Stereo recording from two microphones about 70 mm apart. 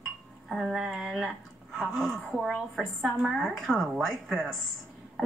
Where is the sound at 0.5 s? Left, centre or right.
Centre.